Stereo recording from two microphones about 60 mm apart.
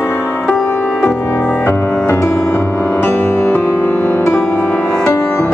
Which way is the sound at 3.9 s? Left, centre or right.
Left.